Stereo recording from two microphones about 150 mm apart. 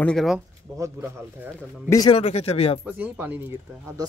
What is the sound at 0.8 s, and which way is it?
Speech, 20° right (ahead or behind).